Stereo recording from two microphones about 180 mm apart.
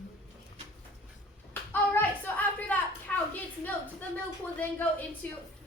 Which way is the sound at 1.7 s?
10° left (ahead or behind).